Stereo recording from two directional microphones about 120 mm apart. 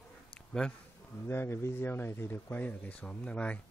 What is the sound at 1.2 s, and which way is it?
Speech, 20° left (ahead or behind).